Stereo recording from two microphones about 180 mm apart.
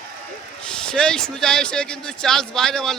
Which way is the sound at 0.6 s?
5° left (ahead or behind).